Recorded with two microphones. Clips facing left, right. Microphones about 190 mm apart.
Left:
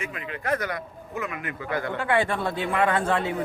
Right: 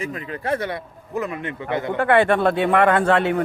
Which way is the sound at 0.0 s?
35° right (ahead or behind).